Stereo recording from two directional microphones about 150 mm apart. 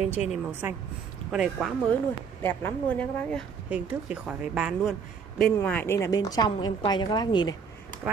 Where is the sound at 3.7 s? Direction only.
5° right (ahead or behind).